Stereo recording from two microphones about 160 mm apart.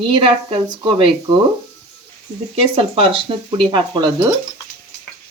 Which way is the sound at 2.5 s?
35° right (ahead or behind).